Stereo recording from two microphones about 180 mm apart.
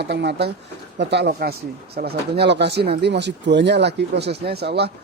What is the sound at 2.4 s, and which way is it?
Speech, 70° right (ahead or behind).